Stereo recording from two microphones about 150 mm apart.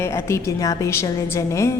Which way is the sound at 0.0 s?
20° left (ahead or behind).